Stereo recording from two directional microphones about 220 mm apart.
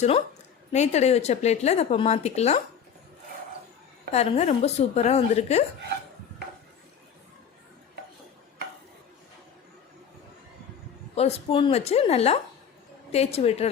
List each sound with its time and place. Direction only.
0.7 s a woman's voice: 30° left (ahead or behind)
4.1 s a woman's voice: 30° left (ahead or behind)
11.1 s a woman's voice: 30° left (ahead or behind)